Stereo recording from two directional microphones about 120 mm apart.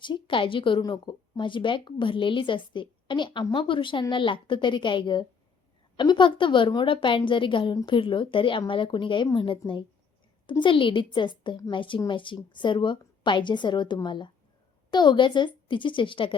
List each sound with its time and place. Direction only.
0.0 s a woman's voice: 45° left (ahead or behind)